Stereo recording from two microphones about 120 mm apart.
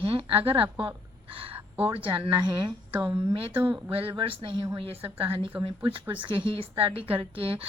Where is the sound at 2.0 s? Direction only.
45° right (ahead or behind).